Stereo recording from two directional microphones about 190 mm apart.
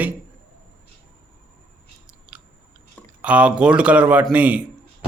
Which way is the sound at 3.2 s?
5° right (ahead or behind).